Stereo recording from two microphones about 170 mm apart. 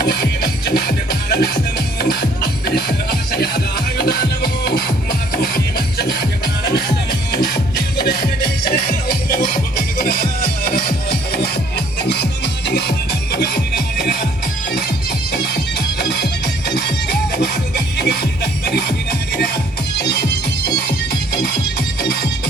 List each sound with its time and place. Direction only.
0.0 s music: 65° left (ahead or behind)
12.0 s music: 75° left (ahead or behind)
15.3 s music: 70° left (ahead or behind)
20.0 s music: 70° left (ahead or behind)
22.0 s music: 70° left (ahead or behind)